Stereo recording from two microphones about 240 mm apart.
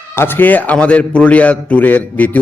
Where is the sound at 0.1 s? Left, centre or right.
Centre.